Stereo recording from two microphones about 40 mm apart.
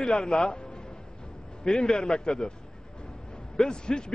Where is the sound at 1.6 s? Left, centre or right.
Centre.